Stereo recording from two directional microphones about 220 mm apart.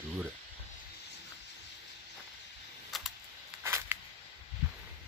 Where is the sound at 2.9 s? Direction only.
Centre (ahead or behind).